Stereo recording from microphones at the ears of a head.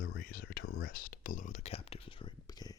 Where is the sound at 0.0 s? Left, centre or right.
Left.